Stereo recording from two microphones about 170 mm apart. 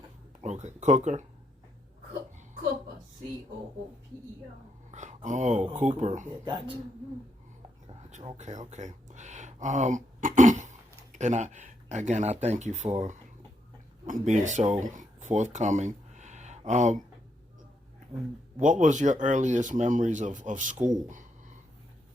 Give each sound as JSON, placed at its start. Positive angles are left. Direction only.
{"t": 0.4, "sound": "speech", "side_deg": -40}
{"t": 4.9, "sound": "a sound", "side_deg": -45}
{"t": 5.8, "sound": "speech", "side_deg": -40}
{"t": 6.3, "sound": "speech", "side_deg": -25}
{"t": 8.4, "sound": "speech", "side_deg": -45}
{"t": 18.6, "sound": "speech", "side_deg": -50}